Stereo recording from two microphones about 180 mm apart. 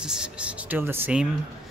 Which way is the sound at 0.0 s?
5° right (ahead or behind).